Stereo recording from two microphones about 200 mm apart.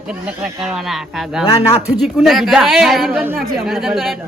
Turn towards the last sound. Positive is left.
turn(degrees=0)  # may be behind; listen again after turning